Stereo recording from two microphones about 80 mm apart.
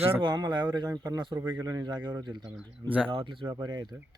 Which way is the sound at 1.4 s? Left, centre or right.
Right.